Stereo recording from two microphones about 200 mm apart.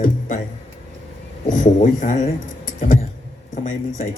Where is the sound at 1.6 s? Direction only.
40° left (ahead or behind).